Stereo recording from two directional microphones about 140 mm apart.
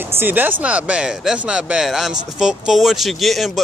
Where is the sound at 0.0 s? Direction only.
15° right (ahead or behind).